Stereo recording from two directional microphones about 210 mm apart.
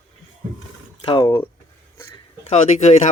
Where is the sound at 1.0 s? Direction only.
20° left (ahead or behind).